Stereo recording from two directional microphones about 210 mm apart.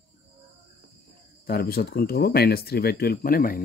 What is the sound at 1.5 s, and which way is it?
Speech, 50° left (ahead or behind).